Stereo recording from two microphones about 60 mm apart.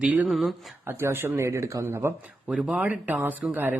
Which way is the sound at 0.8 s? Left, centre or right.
Right.